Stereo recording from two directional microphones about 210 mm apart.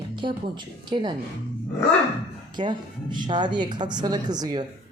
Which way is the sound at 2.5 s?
20° right (ahead or behind).